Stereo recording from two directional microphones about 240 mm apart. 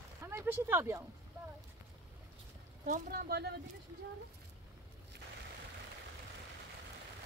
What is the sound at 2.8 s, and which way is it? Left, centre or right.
Speech, right.